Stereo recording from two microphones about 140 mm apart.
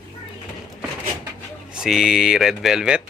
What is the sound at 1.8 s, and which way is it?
Speech, 5° right (ahead or behind).